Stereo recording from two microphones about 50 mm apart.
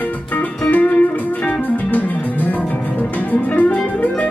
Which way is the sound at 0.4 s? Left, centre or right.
Left.